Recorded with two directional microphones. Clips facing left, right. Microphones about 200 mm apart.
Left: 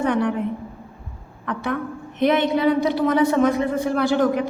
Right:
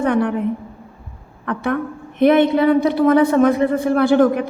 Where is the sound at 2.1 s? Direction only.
55° right (ahead or behind).